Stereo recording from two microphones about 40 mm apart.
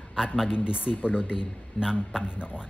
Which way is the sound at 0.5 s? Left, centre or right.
Right.